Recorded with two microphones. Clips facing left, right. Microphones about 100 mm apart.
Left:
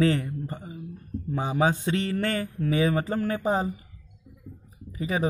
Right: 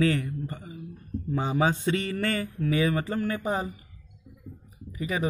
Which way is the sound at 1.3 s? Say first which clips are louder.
Left 1 dB; 15° left (ahead or behind).